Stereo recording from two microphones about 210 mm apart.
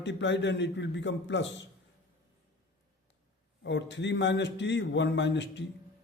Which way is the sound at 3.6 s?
55° left (ahead or behind).